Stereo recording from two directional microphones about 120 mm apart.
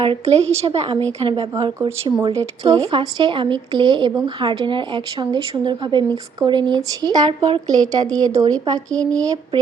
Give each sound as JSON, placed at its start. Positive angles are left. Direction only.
{"t": 0.0, "sound": "a woman's voice", "side_deg": -55}
{"t": 1.6, "sound": "a woman's voice", "side_deg": -35}
{"t": 7.3, "sound": "a woman's voice", "side_deg": -55}
{"t": 7.7, "sound": "speech", "side_deg": -30}